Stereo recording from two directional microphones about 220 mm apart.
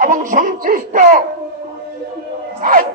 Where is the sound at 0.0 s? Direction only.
35° right (ahead or behind).